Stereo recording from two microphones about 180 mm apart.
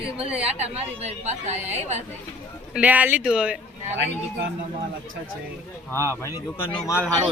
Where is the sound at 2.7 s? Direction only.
10° right (ahead or behind).